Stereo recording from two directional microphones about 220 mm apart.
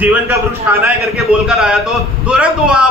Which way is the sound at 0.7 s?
10° right (ahead or behind).